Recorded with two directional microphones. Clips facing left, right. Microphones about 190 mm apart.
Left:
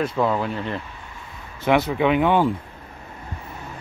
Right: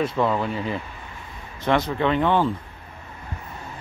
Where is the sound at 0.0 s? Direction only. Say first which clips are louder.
Even; centre (ahead or behind).